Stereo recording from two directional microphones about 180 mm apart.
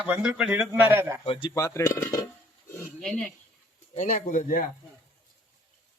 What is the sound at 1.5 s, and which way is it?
Speech, 15° left (ahead or behind).